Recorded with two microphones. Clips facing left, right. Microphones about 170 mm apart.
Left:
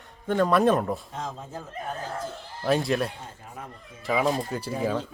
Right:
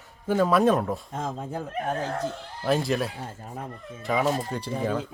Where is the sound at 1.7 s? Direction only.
70° right (ahead or behind).